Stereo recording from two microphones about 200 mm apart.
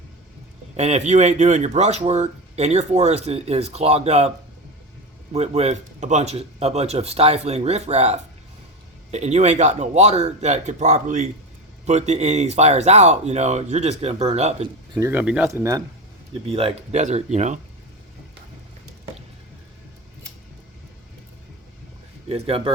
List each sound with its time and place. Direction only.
0.8 s speech: 35° right (ahead or behind)
5.3 s speech: 30° right (ahead or behind)
14.9 s speech: 10° right (ahead or behind)
16.5 s speech: 30° right (ahead or behind)
22.3 s speech: 30° right (ahead or behind)